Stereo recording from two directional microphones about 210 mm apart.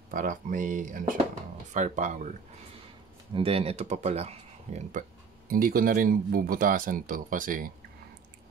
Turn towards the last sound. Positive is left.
turn(degrees=-40)  # may be behind; listen again after turning